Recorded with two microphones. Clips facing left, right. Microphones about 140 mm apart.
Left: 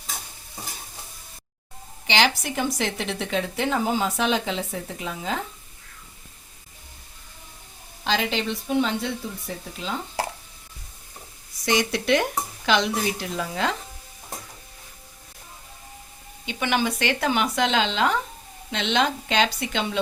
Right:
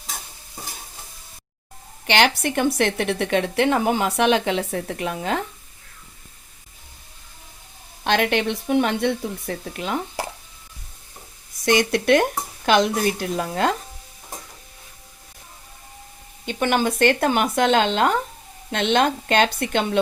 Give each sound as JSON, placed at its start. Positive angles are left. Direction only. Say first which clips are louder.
{"t": 2.0, "sound": "a woman's voice", "louder": "right 3 dB", "side_deg": -60}
{"t": 8.0, "sound": "a woman's voice", "louder": "right 5 dB", "side_deg": -60}
{"t": 11.6, "sound": "a woman's voice", "louder": "right 4 dB", "side_deg": -55}
{"t": 16.5, "sound": "a woman's voice", "louder": "right 4 dB", "side_deg": -45}